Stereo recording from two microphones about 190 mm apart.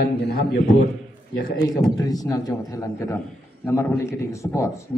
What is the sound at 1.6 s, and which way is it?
A man's voice, 20° left (ahead or behind).